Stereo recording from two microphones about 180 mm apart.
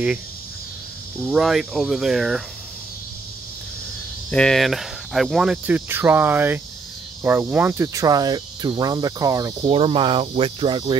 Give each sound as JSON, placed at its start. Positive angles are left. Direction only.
{"t": 1.2, "sound": "speech", "side_deg": 0}
{"t": 4.3, "sound": "speech", "side_deg": 5}
{"t": 7.2, "sound": "cricket", "side_deg": -10}
{"t": 9.6, "sound": "cricket", "side_deg": -30}